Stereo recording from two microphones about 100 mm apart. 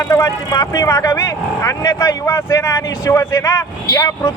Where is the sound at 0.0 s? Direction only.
25° left (ahead or behind).